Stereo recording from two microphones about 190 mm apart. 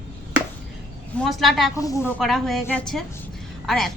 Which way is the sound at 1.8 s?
15° left (ahead or behind).